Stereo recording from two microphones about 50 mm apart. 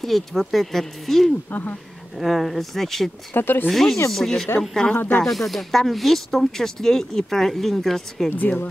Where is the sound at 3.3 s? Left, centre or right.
Left.